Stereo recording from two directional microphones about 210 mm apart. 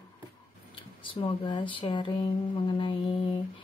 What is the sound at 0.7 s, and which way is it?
Speech, 25° left (ahead or behind).